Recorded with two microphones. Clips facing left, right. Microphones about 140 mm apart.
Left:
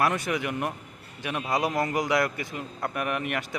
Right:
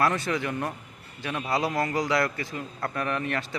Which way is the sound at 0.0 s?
15° left (ahead or behind).